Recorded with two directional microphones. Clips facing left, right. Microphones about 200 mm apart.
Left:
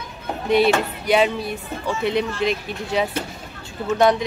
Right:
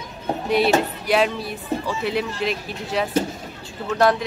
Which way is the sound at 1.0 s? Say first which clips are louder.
Left 2 dB; centre (ahead or behind).